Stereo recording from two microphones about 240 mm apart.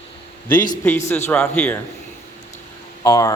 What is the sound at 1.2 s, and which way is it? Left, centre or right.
Speech, centre.